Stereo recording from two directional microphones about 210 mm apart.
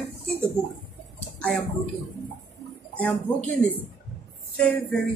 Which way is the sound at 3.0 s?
5° left (ahead or behind).